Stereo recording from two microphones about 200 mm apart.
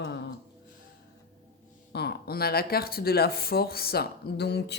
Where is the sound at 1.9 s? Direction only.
55° left (ahead or behind).